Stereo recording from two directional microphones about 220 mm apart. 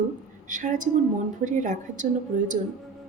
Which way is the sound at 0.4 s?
35° right (ahead or behind).